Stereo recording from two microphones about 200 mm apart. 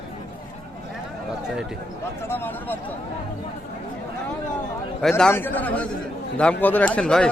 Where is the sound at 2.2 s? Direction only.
10° left (ahead or behind).